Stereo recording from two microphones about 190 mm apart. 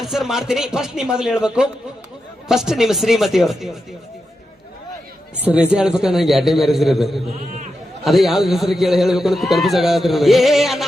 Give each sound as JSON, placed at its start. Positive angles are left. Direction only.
{"t": 0.0, "sound": "a man's voice", "side_deg": 0}
{"t": 5.5, "sound": "a man's voice", "side_deg": -5}